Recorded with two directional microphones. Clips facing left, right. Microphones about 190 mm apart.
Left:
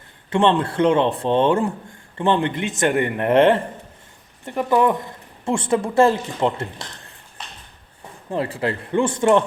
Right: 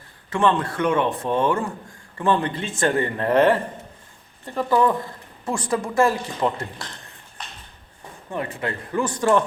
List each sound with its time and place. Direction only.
0.3 s speech: 30° left (ahead or behind)
8.3 s speech: 30° left (ahead or behind)